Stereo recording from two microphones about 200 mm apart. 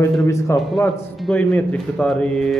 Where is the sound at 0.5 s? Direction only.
Centre (ahead or behind).